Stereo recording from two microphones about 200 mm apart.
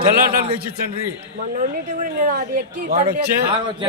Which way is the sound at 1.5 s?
40° right (ahead or behind).